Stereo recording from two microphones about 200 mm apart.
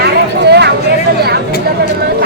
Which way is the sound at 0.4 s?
55° right (ahead or behind).